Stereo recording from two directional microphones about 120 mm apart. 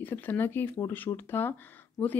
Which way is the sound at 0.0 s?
15° left (ahead or behind).